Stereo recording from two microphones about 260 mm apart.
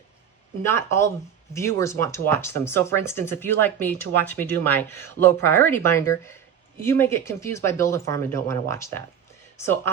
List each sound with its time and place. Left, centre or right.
0.6 s speech: centre